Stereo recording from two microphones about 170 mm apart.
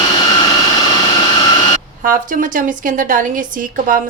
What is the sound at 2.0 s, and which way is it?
A woman's voice, 50° right (ahead or behind).